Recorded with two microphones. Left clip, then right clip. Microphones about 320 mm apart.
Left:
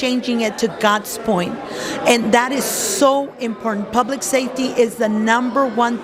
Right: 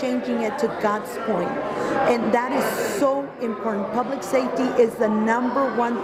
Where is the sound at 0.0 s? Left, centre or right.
Left.